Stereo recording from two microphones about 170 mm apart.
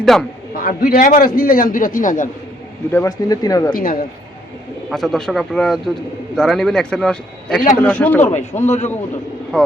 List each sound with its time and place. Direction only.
0.0 s a man's voice: centre (ahead or behind)
0.5 s a man's voice: 60° left (ahead or behind)
2.9 s speech: 20° left (ahead or behind)
3.7 s a man's voice: 60° left (ahead or behind)
4.9 s a man's voice: centre (ahead or behind)
8.2 s a man's voice: 45° left (ahead or behind)
9.5 s speech: 5° left (ahead or behind)